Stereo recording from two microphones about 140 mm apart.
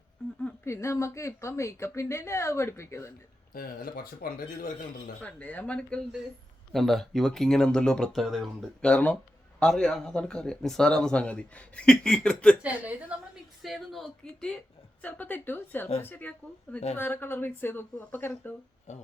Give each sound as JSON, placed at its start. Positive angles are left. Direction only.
{"t": 0.4, "sound": "speech", "side_deg": 20}
{"t": 3.5, "sound": "speech", "side_deg": 90}
{"t": 5.2, "sound": "speech", "side_deg": 10}
{"t": 12.6, "sound": "a woman's voice", "side_deg": -10}
{"t": 18.9, "sound": "speech", "side_deg": 55}